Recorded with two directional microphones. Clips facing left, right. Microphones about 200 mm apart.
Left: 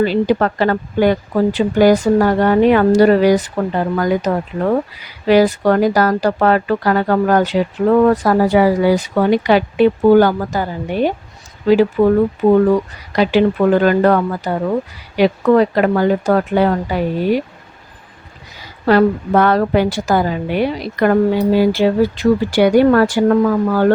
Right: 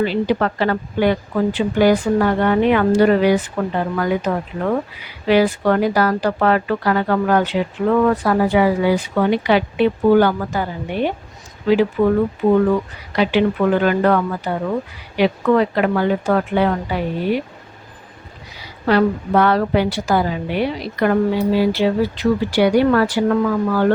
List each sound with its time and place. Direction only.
0.0 s speech: 40° left (ahead or behind)
13.1 s speech: 40° left (ahead or behind)
18.5 s a woman's voice: 45° left (ahead or behind)